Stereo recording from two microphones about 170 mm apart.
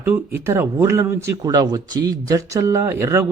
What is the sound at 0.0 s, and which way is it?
A man's voice, 15° right (ahead or behind).